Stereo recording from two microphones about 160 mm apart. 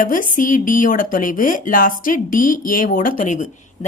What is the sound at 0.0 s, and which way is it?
Speech, 60° left (ahead or behind).